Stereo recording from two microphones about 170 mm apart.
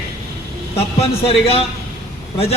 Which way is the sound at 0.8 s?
35° left (ahead or behind).